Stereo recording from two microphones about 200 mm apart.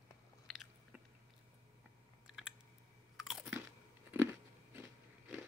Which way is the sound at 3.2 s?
5° right (ahead or behind).